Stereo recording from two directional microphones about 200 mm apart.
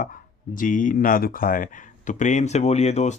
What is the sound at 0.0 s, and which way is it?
Speech, 45° left (ahead or behind).